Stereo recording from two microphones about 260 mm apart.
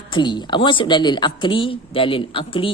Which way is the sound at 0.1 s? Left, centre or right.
Centre.